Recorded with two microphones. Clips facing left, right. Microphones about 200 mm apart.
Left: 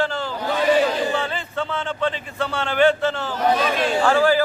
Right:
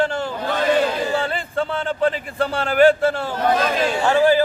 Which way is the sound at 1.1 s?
35° right (ahead or behind).